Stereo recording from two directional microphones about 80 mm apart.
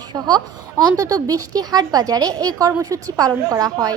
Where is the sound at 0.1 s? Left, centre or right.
Right.